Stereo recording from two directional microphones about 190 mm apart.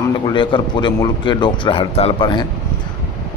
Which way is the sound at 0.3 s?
25° left (ahead or behind).